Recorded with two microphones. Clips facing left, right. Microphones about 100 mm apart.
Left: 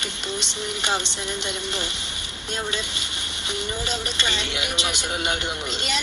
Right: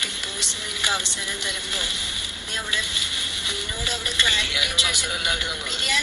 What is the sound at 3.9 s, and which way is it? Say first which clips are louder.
Speech: left 1 dB; 25° left (ahead or behind).